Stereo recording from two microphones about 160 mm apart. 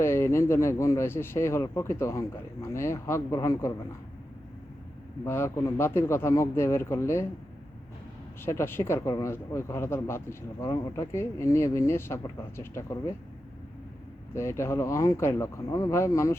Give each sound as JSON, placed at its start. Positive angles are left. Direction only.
{"t": 0.0, "sound": "speech", "side_deg": 15}
{"t": 5.2, "sound": "speech", "side_deg": 15}
{"t": 8.4, "sound": "speech", "side_deg": 15}
{"t": 14.3, "sound": "speech", "side_deg": 15}